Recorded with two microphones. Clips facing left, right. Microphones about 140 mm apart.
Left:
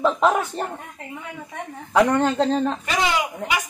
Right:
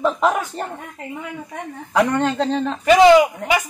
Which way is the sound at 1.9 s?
Centre (ahead or behind).